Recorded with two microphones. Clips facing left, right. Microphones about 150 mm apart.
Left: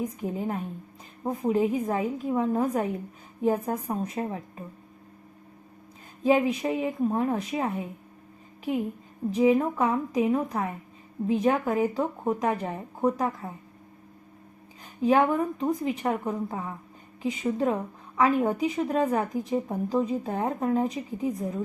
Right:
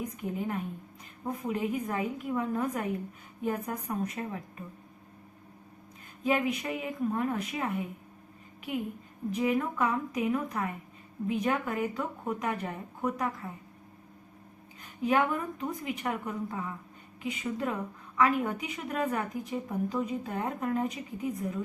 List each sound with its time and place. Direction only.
0.0 s a woman's voice: 30° left (ahead or behind)
6.2 s a woman's voice: 25° left (ahead or behind)
9.3 s a woman's voice: 25° left (ahead or behind)
15.0 s a woman's voice: 30° left (ahead or behind)